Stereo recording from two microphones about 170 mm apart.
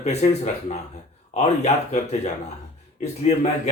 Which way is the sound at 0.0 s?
40° left (ahead or behind).